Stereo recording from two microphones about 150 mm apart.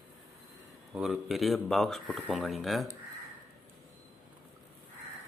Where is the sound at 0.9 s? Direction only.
5° right (ahead or behind).